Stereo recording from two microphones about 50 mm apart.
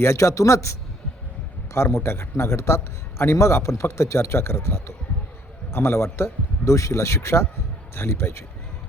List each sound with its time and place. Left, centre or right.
0.0 s a man's voice: left
1.7 s a man's voice: left
2.0 s a man's voice: left
6.7 s a man's voice: left
7.9 s speech: left